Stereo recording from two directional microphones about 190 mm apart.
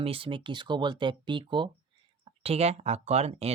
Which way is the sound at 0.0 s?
30° right (ahead or behind).